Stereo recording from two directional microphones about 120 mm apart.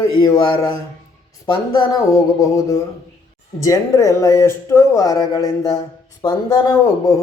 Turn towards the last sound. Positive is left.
turn(degrees=25)  # may be behind; listen again after turning